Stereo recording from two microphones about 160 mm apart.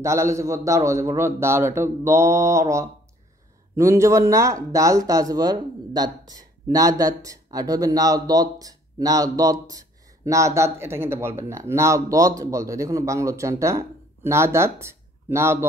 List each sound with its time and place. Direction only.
0.0 s a man's voice: 20° right (ahead or behind)